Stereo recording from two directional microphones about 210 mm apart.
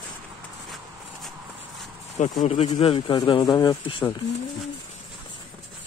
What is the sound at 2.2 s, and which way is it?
Speech, 35° left (ahead or behind).